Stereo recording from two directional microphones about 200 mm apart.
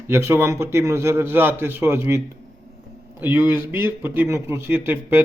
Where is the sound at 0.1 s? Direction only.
15° right (ahead or behind).